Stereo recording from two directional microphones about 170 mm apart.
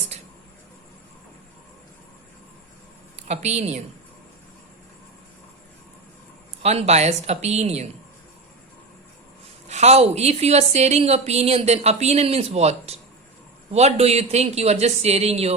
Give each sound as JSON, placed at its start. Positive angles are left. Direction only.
{"t": 3.2, "sound": "a woman's voice", "side_deg": -40}
{"t": 6.6, "sound": "a woman's voice", "side_deg": -40}
{"t": 9.6, "sound": "a woman's voice", "side_deg": -40}